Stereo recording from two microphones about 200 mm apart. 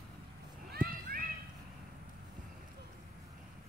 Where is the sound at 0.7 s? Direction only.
45° right (ahead or behind).